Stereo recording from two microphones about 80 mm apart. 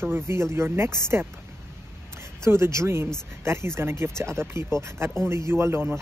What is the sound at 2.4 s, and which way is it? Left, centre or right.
Speech, right.